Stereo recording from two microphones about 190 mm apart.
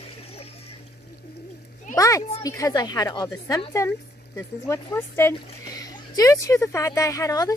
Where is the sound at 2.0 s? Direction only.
15° left (ahead or behind).